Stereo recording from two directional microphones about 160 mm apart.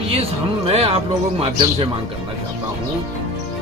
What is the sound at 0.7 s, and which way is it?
Speech, 40° right (ahead or behind).